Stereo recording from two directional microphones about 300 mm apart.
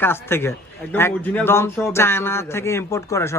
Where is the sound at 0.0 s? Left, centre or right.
Centre.